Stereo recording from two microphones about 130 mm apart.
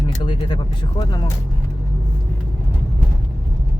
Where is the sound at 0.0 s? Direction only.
40° left (ahead or behind).